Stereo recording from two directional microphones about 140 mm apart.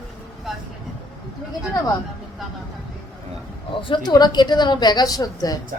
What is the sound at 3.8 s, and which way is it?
A woman's voice, 35° left (ahead or behind).